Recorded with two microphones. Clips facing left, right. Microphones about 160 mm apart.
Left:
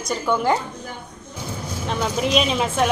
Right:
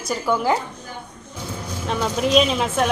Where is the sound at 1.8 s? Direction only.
Centre (ahead or behind).